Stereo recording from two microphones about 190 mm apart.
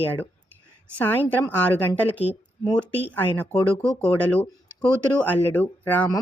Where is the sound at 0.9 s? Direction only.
10° left (ahead or behind).